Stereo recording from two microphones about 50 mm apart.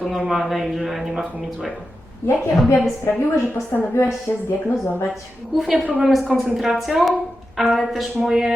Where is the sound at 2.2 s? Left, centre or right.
Left.